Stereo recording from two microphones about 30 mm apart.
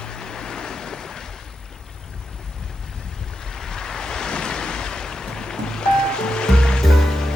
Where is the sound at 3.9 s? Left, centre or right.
Left.